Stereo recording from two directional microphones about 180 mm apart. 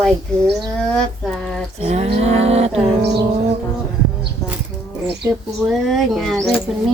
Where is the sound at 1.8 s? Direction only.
35° right (ahead or behind).